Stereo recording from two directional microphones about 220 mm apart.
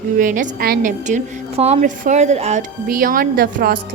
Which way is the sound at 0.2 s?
35° right (ahead or behind).